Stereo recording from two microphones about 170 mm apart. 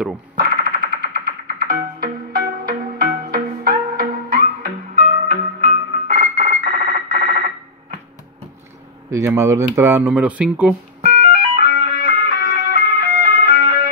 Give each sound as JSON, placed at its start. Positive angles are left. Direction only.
{"t": 0.4, "sound": "music", "side_deg": -55}
{"t": 9.1, "sound": "speech", "side_deg": -15}
{"t": 11.0, "sound": "music", "side_deg": -55}